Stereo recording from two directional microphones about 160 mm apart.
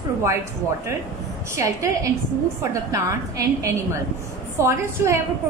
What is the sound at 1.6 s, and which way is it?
A woman's voice, 20° right (ahead or behind).